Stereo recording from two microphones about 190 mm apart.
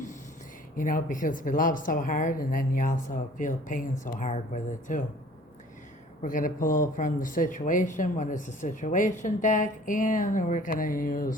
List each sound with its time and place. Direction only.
0.8 s speech: 45° left (ahead or behind)
6.2 s speech: 45° left (ahead or behind)